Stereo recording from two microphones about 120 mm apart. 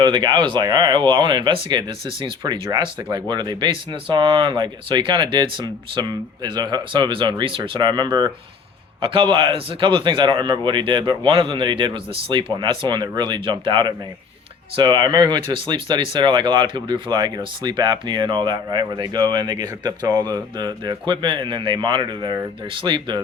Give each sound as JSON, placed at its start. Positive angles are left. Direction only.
{"t": 0.0, "sound": "a man's voice", "side_deg": -40}